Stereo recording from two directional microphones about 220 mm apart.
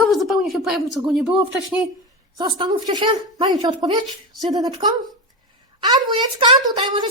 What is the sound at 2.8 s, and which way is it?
A woman's voice, 20° right (ahead or behind).